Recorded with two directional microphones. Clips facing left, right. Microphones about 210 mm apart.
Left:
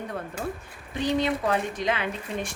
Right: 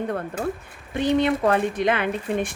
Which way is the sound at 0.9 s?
60° right (ahead or behind).